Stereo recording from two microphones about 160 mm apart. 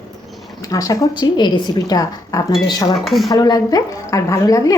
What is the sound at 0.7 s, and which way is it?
A woman's voice, 20° left (ahead or behind).